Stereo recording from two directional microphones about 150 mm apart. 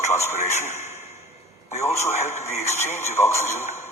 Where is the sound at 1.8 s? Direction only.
20° left (ahead or behind).